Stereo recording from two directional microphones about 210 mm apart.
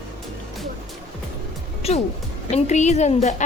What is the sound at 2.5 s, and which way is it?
Speech, 35° left (ahead or behind).